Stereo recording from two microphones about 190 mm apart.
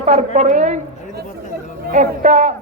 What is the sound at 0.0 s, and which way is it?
Speech, 35° right (ahead or behind).